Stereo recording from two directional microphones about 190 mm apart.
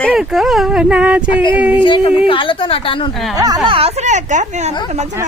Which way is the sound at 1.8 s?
25° left (ahead or behind).